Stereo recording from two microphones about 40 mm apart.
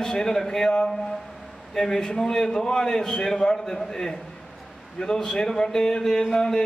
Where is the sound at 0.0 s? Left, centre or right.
Centre.